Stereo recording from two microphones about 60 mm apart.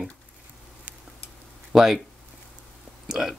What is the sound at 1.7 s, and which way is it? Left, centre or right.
Speech, centre.